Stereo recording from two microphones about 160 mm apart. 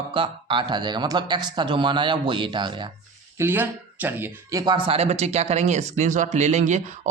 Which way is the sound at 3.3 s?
15° right (ahead or behind).